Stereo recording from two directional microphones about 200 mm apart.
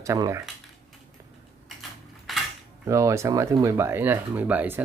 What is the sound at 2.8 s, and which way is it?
Speech, 15° right (ahead or behind).